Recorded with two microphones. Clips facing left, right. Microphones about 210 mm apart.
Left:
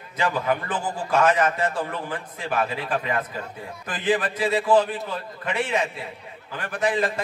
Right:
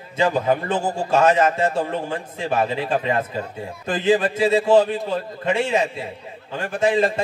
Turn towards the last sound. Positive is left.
turn(degrees=-25)  # may be behind; listen again after turning